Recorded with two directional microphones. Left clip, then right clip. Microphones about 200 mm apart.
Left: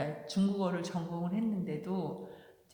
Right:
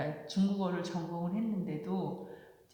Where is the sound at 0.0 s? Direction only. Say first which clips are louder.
Left 1 dB; 35° left (ahead or behind).